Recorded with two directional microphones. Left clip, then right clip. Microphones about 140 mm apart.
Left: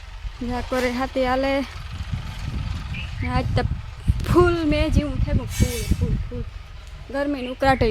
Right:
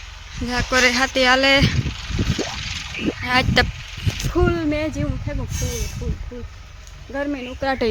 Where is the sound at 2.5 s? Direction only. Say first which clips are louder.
Right 10 dB; 80° left.